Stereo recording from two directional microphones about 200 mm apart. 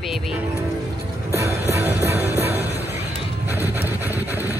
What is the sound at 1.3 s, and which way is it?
Music, 15° right (ahead or behind).